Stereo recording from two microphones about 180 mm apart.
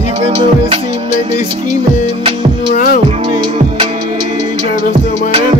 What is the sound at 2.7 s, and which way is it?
Music, 55° left (ahead or behind).